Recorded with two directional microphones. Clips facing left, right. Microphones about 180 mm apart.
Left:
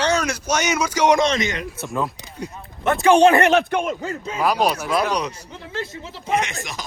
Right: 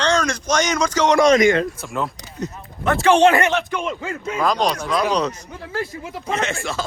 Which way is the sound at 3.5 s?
55° left (ahead or behind).